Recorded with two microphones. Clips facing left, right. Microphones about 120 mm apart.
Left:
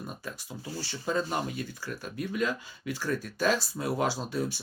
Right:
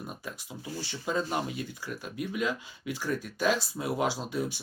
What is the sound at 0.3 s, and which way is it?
Speech, 10° right (ahead or behind).